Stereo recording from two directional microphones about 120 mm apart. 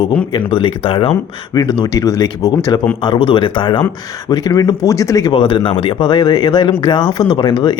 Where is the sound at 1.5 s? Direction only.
35° left (ahead or behind).